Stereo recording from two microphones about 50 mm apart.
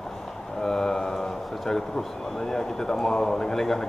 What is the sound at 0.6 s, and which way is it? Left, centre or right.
Speech, centre.